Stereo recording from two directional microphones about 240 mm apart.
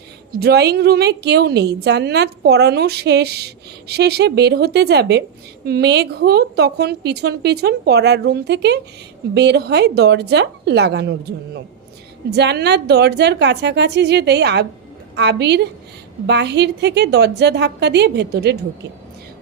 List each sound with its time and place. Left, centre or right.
0.3 s a woman's voice: right